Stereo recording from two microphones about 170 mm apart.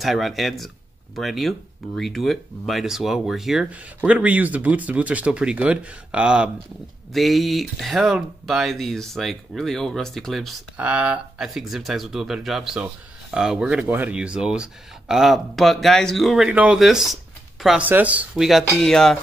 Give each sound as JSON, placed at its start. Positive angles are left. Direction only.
{"t": 0.0, "sound": "speech", "side_deg": 0}